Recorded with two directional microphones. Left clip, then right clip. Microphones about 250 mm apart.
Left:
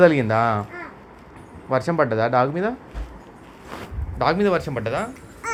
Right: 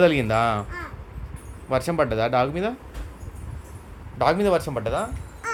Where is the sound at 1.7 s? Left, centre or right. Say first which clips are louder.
Left 2 dB; right.